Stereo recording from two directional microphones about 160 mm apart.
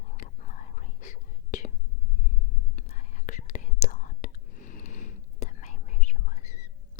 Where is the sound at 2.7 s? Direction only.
45° left (ahead or behind).